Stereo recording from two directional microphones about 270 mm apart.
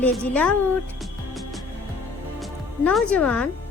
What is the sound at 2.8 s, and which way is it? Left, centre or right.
Speech, centre.